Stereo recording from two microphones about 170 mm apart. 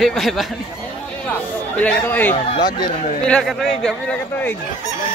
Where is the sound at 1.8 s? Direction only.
10° left (ahead or behind).